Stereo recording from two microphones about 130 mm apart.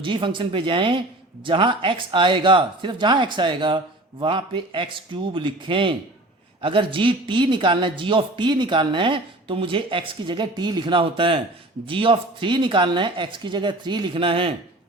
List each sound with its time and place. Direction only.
0.0 s speech: 40° right (ahead or behind)